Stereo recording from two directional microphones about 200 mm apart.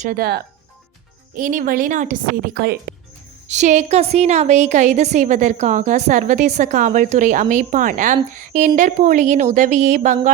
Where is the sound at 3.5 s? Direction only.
35° right (ahead or behind).